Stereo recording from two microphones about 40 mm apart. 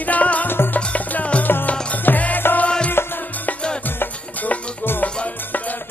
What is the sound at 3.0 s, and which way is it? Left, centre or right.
Music, left.